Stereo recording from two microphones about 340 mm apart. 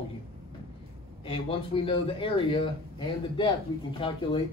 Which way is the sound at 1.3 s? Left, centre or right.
Centre.